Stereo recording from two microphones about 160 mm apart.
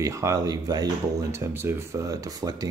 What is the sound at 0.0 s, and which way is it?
Speech, 20° right (ahead or behind).